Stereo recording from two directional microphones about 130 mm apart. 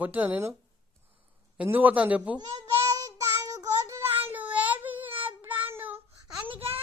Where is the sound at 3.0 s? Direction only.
25° right (ahead or behind).